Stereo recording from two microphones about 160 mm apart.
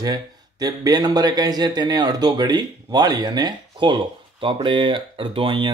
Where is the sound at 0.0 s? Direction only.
25° right (ahead or behind).